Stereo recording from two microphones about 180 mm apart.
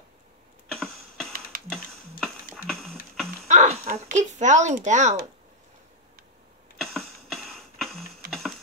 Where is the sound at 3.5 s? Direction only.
40° right (ahead or behind).